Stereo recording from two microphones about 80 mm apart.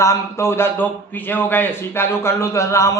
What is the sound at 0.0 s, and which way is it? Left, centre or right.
A man's voice, left.